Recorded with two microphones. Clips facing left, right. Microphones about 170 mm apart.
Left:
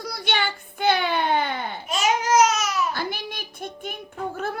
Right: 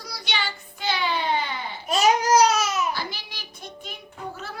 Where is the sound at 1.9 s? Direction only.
35° right (ahead or behind).